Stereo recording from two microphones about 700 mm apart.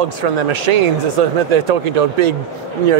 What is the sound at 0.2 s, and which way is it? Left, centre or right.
Speech, right.